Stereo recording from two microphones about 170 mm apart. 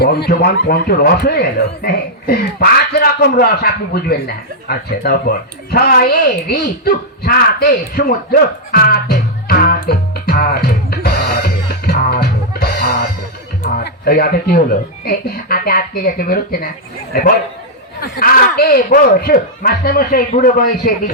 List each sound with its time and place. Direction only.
0.0 s speech: 70° left (ahead or behind)
4.7 s a sound: 65° left (ahead or behind)
13.7 s speech: 65° left (ahead or behind)